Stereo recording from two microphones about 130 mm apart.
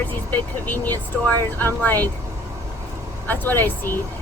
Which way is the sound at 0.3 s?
15° left (ahead or behind).